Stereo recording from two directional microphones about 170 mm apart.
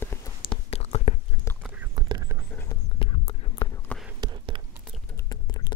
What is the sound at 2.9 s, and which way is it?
Music, 30° left (ahead or behind).